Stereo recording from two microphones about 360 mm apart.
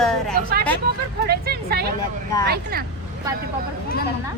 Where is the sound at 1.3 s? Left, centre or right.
Right.